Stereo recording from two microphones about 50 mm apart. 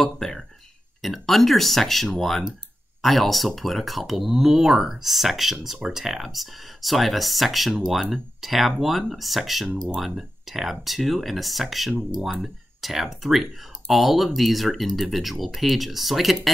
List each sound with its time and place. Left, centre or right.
0.0 s speech: centre
5.8 s speech: centre
6.0 s speech: centre